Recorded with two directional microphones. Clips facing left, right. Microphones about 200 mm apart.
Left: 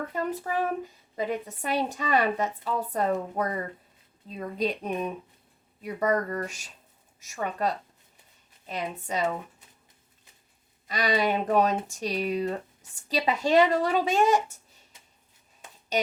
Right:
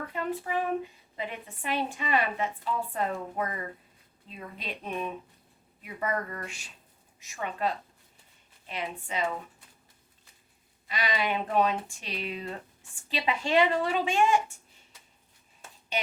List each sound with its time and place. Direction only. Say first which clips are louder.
0.1 s a woman's voice: left 2 dB; 40° left (ahead or behind)
10.8 s a woman's voice: left 5 dB; 40° left (ahead or behind)
15.9 s a sound: left 6 dB; 40° left (ahead or behind)